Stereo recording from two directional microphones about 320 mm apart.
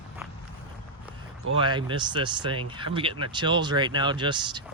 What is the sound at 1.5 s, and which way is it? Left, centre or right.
Speech, centre.